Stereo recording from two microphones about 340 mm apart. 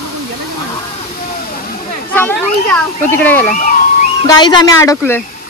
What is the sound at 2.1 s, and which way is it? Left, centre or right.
Speech, centre.